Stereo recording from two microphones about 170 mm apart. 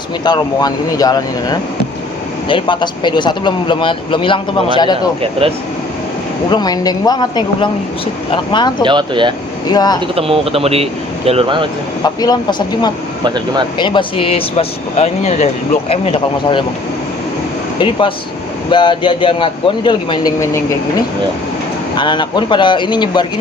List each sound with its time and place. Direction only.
0.3 s speech: 25° left (ahead or behind)
6.5 s speech: 25° left (ahead or behind)
8.8 s speech: 30° right (ahead or behind)
9.6 s speech: 25° left (ahead or behind)
10.2 s speech: 35° right (ahead or behind)
12.0 s speech: 25° left (ahead or behind)
13.2 s speech: 25° right (ahead or behind)
13.7 s speech: 25° left (ahead or behind)
17.7 s speech: 30° left (ahead or behind)
21.9 s speech: 25° left (ahead or behind)